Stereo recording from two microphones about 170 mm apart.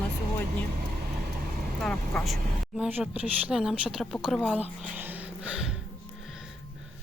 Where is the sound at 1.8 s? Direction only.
5° left (ahead or behind).